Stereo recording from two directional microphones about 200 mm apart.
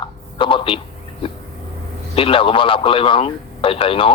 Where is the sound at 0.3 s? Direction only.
25° left (ahead or behind).